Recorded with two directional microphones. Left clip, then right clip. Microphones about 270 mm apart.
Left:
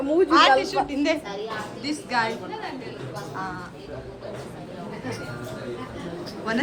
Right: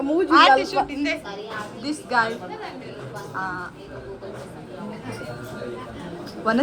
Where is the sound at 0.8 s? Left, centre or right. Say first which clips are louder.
Right 2 dB; right.